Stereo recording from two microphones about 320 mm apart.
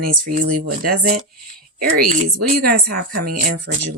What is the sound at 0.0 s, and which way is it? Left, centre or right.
Speech, right.